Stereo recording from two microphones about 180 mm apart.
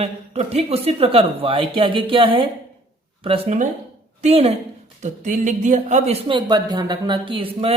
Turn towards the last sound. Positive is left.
turn(degrees=-30)  # may be behind; listen again after turning